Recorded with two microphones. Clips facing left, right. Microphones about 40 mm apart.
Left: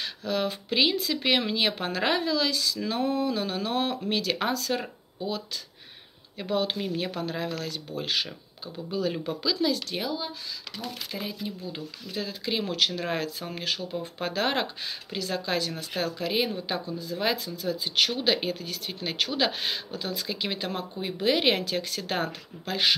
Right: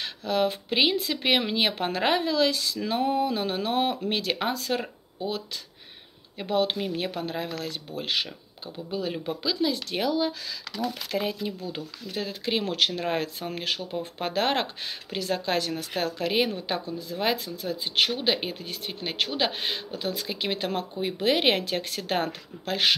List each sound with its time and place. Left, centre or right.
0.0 s speech: right
6.3 s speech: right
9.2 s speech: right
9.8 s speech: right
10.0 s speech: right
11.1 s speech: right